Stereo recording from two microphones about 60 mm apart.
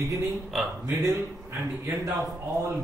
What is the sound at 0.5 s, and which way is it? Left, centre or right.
Speech, centre.